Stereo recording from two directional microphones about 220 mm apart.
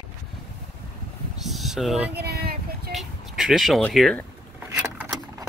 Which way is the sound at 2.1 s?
45° right (ahead or behind).